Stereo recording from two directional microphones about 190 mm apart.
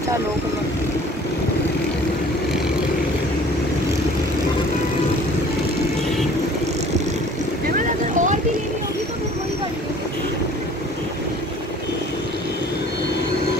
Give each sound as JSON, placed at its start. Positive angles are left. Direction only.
{"t": 7.6, "sound": "vehicle", "side_deg": -45}